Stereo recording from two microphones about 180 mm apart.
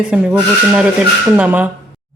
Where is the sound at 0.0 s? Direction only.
5° right (ahead or behind).